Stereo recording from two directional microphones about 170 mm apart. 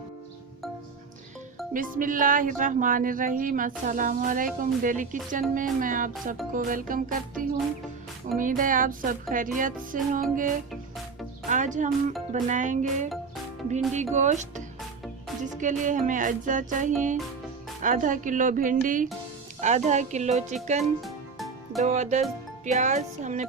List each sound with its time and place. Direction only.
1.7 s speech: 55° right (ahead or behind)
21.0 s music: centre (ahead or behind)
21.8 s speech: 40° right (ahead or behind)